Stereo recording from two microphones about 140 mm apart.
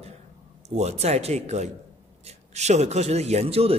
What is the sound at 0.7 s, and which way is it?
A man's voice, 50° right (ahead or behind).